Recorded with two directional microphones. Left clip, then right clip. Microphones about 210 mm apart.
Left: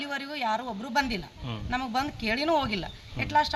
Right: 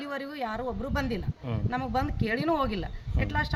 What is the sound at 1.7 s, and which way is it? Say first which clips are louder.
Speech: left 1 dB; 10° right (ahead or behind).